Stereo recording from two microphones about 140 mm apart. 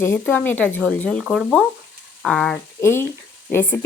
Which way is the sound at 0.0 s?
15° left (ahead or behind).